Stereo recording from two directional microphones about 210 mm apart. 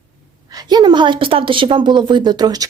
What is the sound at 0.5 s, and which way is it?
Speech, 20° right (ahead or behind).